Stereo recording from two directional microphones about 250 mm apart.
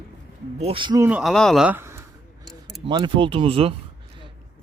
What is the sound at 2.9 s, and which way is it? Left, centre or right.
Speech, centre.